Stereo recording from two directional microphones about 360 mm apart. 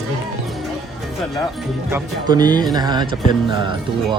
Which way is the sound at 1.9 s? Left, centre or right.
Centre.